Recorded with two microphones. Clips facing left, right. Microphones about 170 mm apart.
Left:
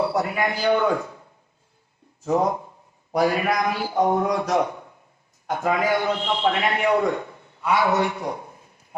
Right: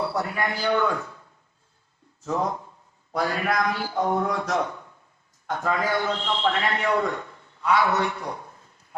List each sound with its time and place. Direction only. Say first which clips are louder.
0.0 s a man's voice: left 4 dB; 15° left (ahead or behind)
2.2 s a man's voice: left 5 dB; 15° left (ahead or behind)